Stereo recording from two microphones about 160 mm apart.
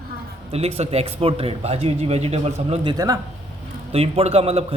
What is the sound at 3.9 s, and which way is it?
Speech, 40° right (ahead or behind).